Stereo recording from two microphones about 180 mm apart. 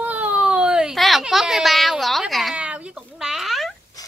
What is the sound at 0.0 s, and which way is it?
Baby cry, 10° right (ahead or behind).